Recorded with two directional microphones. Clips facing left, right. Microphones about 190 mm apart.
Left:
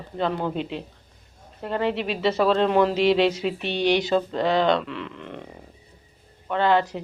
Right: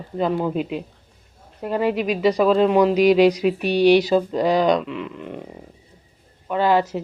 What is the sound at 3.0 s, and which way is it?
A woman's voice, 25° left (ahead or behind).